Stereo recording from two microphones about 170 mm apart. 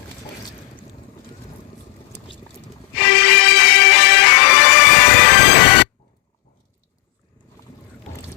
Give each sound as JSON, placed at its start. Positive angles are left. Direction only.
{"t": 3.2, "sound": "music", "side_deg": 75}